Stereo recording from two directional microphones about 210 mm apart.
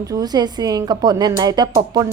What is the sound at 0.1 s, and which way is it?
Speech, 20° right (ahead or behind).